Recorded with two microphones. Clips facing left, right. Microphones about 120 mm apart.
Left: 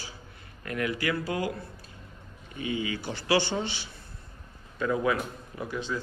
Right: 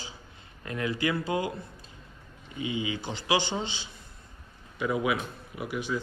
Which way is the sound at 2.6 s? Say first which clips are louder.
Even; 20° right (ahead or behind).